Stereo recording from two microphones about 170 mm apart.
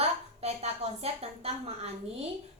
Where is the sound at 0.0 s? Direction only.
40° right (ahead or behind).